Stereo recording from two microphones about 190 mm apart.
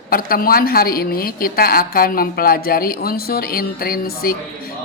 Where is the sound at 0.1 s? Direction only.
50° left (ahead or behind).